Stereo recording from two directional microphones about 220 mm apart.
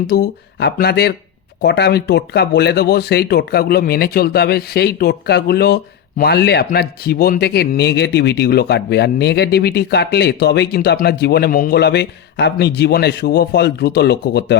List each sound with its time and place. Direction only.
0.1 s speech: 45° left (ahead or behind)